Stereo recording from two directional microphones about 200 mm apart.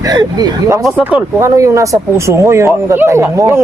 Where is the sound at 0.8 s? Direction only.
5° right (ahead or behind).